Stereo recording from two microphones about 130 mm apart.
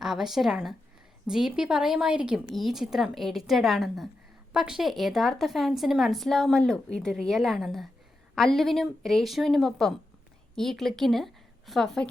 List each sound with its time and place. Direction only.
0.0 s a woman's voice: centre (ahead or behind)